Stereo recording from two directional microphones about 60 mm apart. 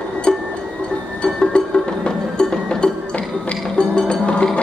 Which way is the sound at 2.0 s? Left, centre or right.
Centre.